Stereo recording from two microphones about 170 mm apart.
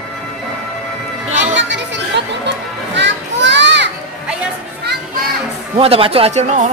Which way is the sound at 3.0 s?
90° right.